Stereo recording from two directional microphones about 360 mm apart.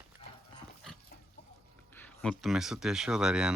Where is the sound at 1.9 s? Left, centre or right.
Centre.